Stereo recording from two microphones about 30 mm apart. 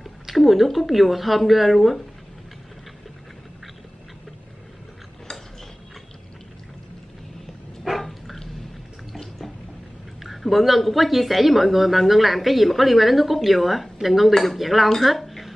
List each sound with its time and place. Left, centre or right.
0.4 s speech: centre
5.3 s mechanisms: centre
8.0 s dog: centre
10.2 s speech: centre
15.0 s a sound: centre